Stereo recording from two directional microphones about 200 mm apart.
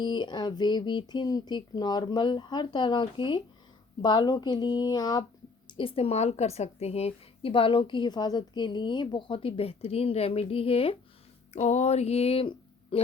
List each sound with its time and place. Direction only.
0.0 s a woman's voice: 20° left (ahead or behind)